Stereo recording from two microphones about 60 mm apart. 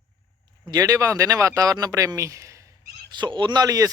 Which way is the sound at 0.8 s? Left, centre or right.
Right.